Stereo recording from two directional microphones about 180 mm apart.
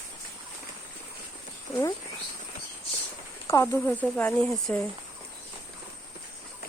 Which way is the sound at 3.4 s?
15° left (ahead or behind).